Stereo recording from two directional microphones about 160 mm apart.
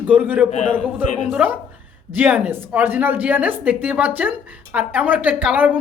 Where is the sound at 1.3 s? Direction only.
10° right (ahead or behind).